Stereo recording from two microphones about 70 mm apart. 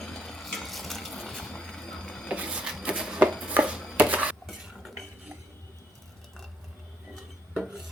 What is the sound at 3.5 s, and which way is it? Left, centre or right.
Chopping, centre.